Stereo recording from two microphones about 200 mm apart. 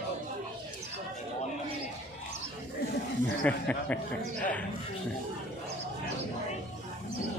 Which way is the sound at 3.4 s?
5° left (ahead or behind).